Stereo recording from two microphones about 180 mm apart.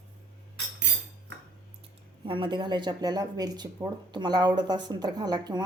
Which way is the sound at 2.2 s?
30° right (ahead or behind).